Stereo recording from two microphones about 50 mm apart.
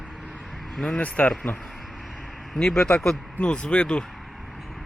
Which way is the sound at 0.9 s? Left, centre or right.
Left.